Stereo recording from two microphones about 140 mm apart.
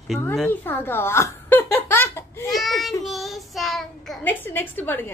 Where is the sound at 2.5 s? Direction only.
Centre (ahead or behind).